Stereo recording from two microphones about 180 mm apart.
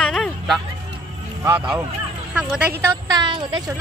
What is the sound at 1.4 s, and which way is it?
Speech, 10° right (ahead or behind).